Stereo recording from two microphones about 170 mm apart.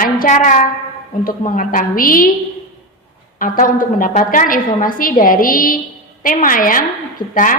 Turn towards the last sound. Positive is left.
turn(degrees=50)  # may be behind; listen again after turning